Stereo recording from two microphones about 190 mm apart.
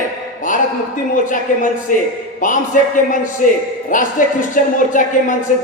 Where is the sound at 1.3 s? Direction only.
45° left (ahead or behind).